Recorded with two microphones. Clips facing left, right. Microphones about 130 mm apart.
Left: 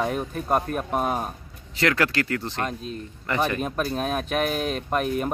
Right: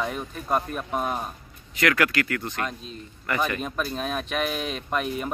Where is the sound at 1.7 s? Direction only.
30° left (ahead or behind).